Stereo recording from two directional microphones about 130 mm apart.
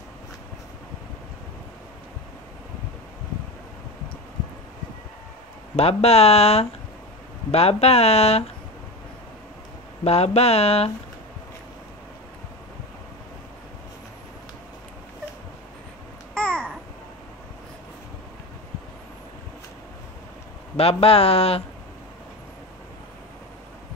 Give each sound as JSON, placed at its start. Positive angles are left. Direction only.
{"t": 5.8, "sound": "speech", "side_deg": 55}
{"t": 10.0, "sound": "speech", "side_deg": 55}
{"t": 16.3, "sound": "babbling", "side_deg": 10}
{"t": 20.7, "sound": "speech", "side_deg": 50}